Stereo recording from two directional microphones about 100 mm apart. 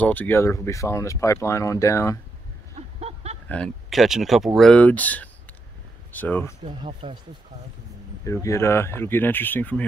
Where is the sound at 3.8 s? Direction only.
5° right (ahead or behind).